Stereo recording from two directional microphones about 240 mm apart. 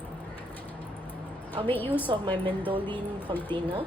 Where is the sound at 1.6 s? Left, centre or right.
Centre.